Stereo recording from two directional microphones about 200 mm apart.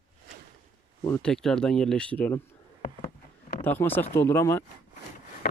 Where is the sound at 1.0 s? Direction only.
15° left (ahead or behind).